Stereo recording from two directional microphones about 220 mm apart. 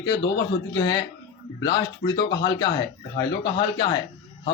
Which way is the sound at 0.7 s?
20° left (ahead or behind).